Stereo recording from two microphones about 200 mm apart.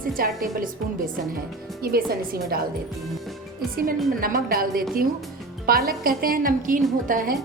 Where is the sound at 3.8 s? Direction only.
45° right (ahead or behind).